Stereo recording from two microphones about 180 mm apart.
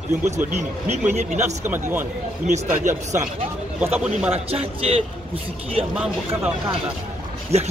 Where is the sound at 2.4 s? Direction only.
40° right (ahead or behind).